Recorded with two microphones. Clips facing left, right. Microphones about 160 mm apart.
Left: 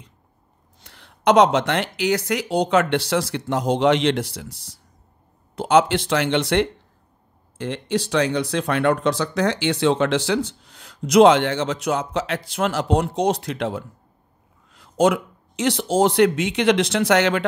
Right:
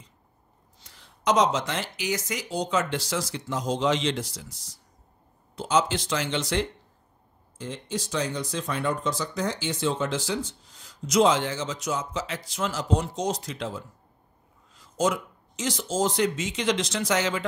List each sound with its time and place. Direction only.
0.7 s speech: 65° left (ahead or behind)